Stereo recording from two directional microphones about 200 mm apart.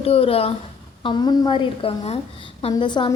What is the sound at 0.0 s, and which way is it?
A woman's voice, 30° left (ahead or behind).